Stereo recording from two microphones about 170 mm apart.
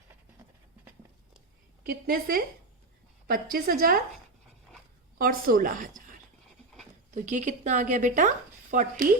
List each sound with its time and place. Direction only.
1.9 s a woman's voice: 60° right (ahead or behind)
5.1 s a woman's voice: 55° right (ahead or behind)